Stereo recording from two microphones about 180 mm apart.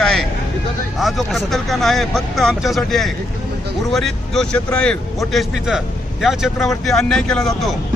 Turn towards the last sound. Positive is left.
turn(degrees=0)  # may be behind; listen again after turning